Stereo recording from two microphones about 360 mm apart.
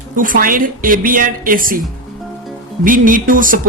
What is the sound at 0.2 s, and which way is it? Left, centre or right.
Speech, right.